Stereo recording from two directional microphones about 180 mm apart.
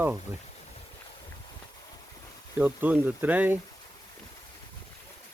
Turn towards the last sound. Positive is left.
turn(degrees=-10)  # may be behind; listen again after turning